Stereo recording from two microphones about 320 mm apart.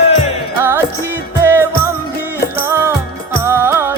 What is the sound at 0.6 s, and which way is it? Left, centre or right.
Music, centre.